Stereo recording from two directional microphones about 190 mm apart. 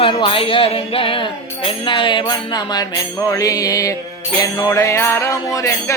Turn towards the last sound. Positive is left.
turn(degrees=15)  # may be behind; listen again after turning